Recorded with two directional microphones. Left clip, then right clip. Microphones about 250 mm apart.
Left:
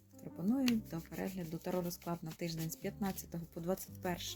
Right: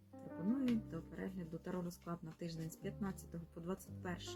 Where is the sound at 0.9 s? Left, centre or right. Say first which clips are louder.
Left 5 dB; left.